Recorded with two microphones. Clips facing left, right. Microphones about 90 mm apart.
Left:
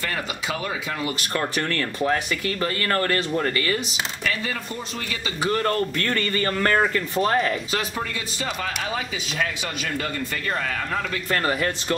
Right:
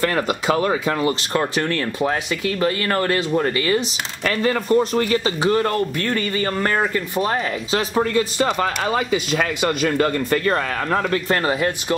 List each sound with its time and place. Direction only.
0.0 s a man's voice: 50° right (ahead or behind)
1.3 s speech: 20° right (ahead or behind)
4.2 s a man's voice: 50° right (ahead or behind)
5.4 s speech: 20° right (ahead or behind)
7.2 s speech: 5° right (ahead or behind)
7.9 s a man's voice: 45° right (ahead or behind)
11.3 s speech: 20° right (ahead or behind)